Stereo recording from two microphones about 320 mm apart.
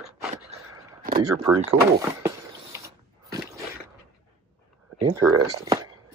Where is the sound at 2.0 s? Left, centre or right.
Centre.